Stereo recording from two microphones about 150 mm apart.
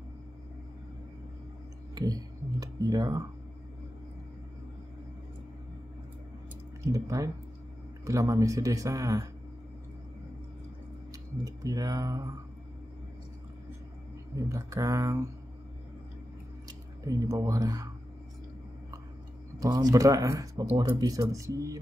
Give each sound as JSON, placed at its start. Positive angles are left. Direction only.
{"t": 2.0, "sound": "speech", "side_deg": -25}
{"t": 6.9, "sound": "speech", "side_deg": -20}
{"t": 11.4, "sound": "speech", "side_deg": -25}
{"t": 14.3, "sound": "speech", "side_deg": -20}
{"t": 16.6, "sound": "speech", "side_deg": -25}
{"t": 19.6, "sound": "speech", "side_deg": -25}